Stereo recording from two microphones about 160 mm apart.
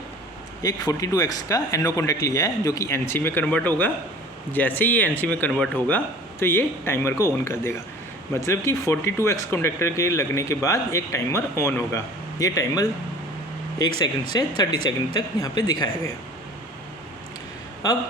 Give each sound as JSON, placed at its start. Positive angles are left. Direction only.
{"t": 0.6, "sound": "speech", "side_deg": 20}